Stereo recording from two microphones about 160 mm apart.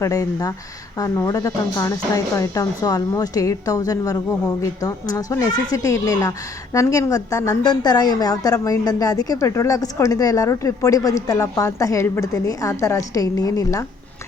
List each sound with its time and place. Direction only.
0.0 s a woman's voice: 20° left (ahead or behind)